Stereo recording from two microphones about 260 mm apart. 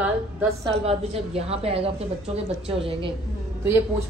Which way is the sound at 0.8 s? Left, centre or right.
Right.